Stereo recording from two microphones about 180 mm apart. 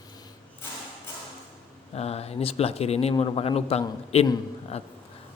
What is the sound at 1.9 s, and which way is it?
A man's voice, 35° left (ahead or behind).